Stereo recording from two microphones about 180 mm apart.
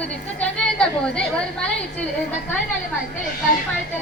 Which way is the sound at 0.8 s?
5° left (ahead or behind).